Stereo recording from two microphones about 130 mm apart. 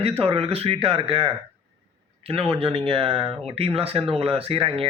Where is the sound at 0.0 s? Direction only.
45° right (ahead or behind).